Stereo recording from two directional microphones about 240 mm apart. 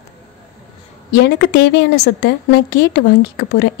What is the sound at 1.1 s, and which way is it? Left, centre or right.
A woman's voice, left.